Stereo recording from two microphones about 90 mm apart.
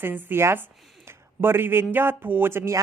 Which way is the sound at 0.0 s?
20° right (ahead or behind).